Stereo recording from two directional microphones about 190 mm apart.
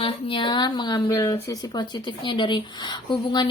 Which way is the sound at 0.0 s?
25° left (ahead or behind).